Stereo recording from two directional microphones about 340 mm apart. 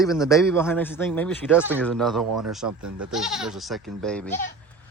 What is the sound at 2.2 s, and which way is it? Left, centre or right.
Speech, right.